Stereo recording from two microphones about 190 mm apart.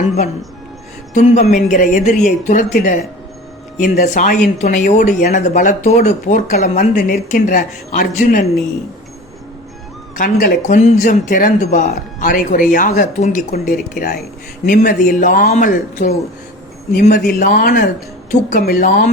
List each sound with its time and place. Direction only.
1.1 s speech: 35° left (ahead or behind)
10.2 s a woman's voice: 45° left (ahead or behind)